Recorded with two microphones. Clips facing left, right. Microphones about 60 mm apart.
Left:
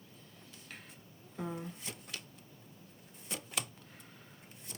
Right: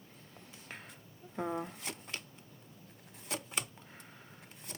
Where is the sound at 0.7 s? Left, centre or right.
Right.